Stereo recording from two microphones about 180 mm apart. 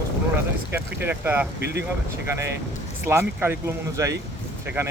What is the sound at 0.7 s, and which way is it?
Speech, 10° right (ahead or behind).